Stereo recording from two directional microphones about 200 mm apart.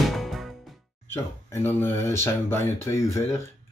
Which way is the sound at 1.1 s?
10° left (ahead or behind).